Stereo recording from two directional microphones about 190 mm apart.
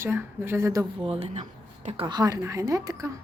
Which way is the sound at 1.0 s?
35° right (ahead or behind).